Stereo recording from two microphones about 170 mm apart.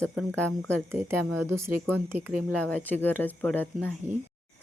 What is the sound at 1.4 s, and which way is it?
Speech, 15° right (ahead or behind).